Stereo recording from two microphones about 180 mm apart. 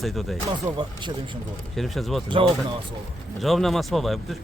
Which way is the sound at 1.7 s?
Centre (ahead or behind).